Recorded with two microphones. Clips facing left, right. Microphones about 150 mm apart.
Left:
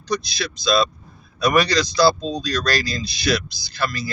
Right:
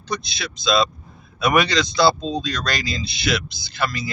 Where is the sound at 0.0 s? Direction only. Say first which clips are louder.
Left 4 dB; 25° right (ahead or behind).